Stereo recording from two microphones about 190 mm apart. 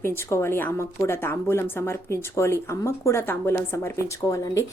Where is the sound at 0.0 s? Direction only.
15° left (ahead or behind).